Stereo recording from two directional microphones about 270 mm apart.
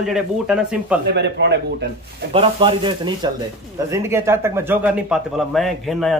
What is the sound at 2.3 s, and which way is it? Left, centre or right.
Speech, right.